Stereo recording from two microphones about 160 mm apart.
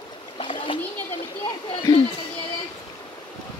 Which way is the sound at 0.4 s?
30° left (ahead or behind).